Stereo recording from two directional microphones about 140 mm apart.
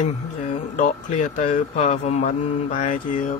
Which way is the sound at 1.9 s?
50° left (ahead or behind).